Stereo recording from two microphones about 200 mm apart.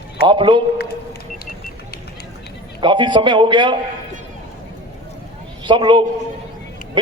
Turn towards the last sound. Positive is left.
turn(degrees=-25)  # may be behind; listen again after turning